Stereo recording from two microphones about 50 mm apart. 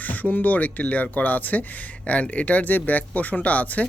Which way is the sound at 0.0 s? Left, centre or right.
Left.